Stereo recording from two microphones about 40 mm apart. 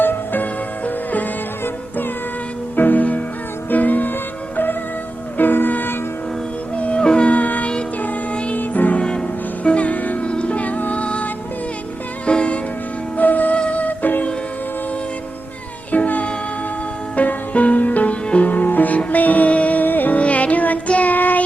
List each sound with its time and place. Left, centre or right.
0.0 s music: left
2.7 s music: left
6.7 s music: left
7.0 s music: left
7.3 s music: left
9.0 s music: left
9.6 s music: left
10.2 s music: left
13.1 s music: left
15.9 s music: left
20.1 s music: left